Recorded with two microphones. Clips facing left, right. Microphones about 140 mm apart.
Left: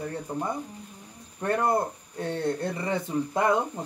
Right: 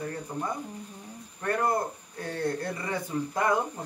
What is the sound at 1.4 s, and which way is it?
Speech, 25° left (ahead or behind).